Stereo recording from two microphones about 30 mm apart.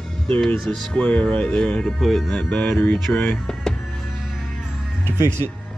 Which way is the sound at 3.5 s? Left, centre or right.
Left.